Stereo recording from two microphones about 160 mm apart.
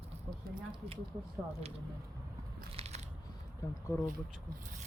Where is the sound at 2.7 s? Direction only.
40° right (ahead or behind).